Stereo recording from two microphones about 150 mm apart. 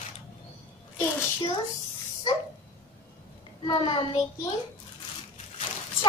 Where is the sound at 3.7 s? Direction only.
35° left (ahead or behind).